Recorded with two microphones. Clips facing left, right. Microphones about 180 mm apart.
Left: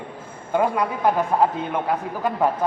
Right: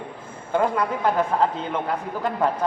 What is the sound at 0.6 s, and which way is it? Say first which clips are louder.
Speech: left 1 dB; 10° left (ahead or behind).